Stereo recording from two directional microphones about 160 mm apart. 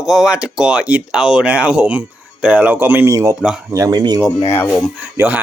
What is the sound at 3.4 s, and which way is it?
Speech, 5° right (ahead or behind).